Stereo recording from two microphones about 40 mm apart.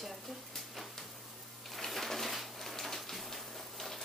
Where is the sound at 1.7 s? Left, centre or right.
Centre.